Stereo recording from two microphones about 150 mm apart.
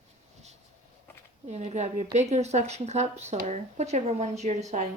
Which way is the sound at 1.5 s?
50° right (ahead or behind).